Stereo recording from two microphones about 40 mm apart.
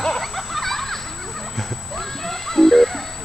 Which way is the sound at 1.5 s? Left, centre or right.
Centre.